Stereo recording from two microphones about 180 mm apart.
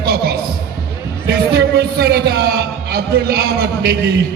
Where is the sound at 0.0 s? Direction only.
60° right (ahead or behind).